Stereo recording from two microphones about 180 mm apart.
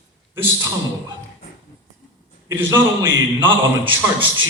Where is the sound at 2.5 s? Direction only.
15° right (ahead or behind).